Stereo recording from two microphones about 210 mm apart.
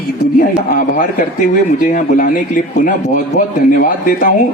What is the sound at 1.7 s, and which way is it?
A man's voice, 40° left (ahead or behind).